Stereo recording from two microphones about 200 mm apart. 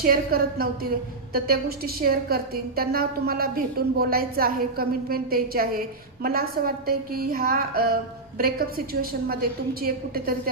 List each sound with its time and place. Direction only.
0.0 s a woman's voice: 50° right (ahead or behind)